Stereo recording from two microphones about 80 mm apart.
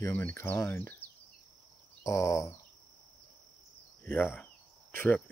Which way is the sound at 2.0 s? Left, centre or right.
Left.